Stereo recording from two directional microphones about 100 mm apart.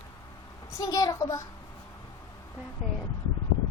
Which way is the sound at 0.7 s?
35° left (ahead or behind).